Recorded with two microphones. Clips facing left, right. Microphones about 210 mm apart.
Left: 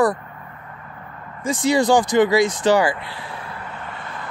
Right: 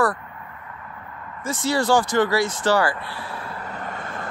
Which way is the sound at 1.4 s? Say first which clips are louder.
Left 4 dB; 15° left (ahead or behind).